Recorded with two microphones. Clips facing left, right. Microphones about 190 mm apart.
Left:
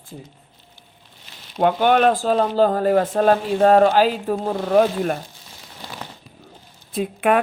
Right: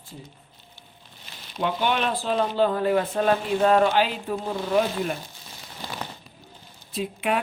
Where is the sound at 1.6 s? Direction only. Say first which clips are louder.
Left 9 dB; 50° left (ahead or behind).